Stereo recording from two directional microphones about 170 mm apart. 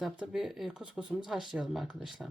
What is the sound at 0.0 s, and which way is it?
Speech, 5° right (ahead or behind).